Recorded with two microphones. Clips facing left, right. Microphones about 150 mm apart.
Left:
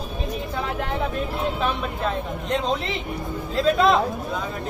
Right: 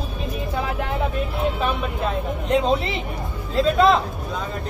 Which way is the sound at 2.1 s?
5° right (ahead or behind).